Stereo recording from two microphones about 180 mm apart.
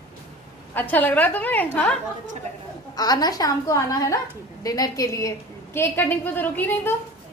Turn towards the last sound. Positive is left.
turn(degrees=10)  # may be behind; listen again after turning